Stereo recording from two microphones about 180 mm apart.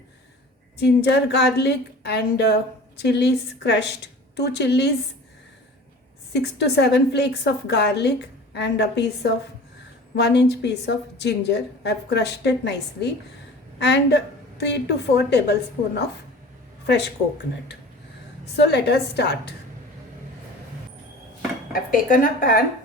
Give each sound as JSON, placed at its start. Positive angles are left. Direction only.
{"t": 0.8, "sound": "a woman's voice", "side_deg": 70}
{"t": 6.3, "sound": "a woman's voice", "side_deg": 65}
{"t": 16.8, "sound": "a woman's voice", "side_deg": 70}
{"t": 21.7, "sound": "a woman's voice", "side_deg": 50}